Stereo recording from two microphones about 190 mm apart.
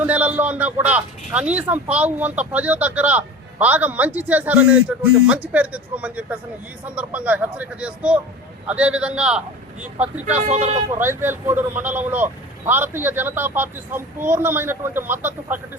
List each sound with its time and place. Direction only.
0.0 s a man's voice: 10° right (ahead or behind)
10.4 s speech: 35° right (ahead or behind)
10.9 s a man's voice: 10° right (ahead or behind)